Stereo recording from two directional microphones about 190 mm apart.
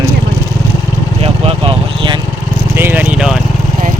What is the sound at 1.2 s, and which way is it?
Vehicle, 30° right (ahead or behind).